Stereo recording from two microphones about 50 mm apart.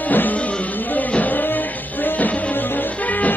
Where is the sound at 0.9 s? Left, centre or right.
Left.